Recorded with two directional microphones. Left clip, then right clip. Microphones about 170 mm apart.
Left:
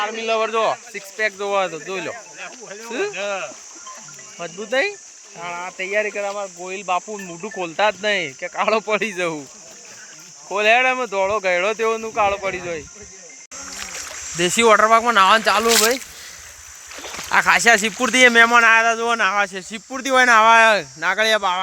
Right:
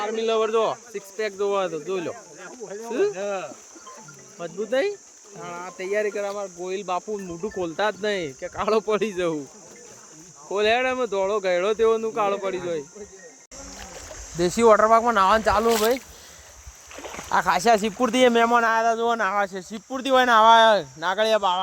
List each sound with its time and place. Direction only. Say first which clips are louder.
0.0 s speech: left 2 dB; 5° right (ahead or behind)
3.2 s speech: left 3 dB; 35° right (ahead or behind)
4.4 s speech: left 3 dB; 10° left (ahead or behind)
10.5 s speech: left 6 dB; 5° left (ahead or behind)
14.3 s speech: left 3 dB; 5° left (ahead or behind)
16.9 s a sound: left 4 dB; 20° left (ahead or behind)
17.3 s speech: left 5 dB; 5° left (ahead or behind)
18.9 s speech: left 4 dB; 30° left (ahead or behind)
19.9 s speech: left 4 dB; 40° left (ahead or behind)
21.2 s speech: left 2 dB; 10° left (ahead or behind)